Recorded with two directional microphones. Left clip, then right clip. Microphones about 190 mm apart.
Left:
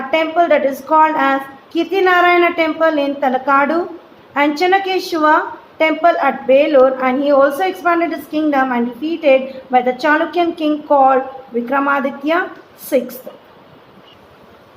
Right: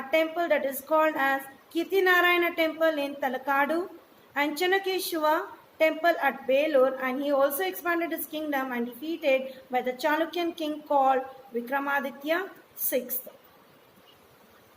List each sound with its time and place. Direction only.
0.1 s a woman's voice: 50° right (ahead or behind)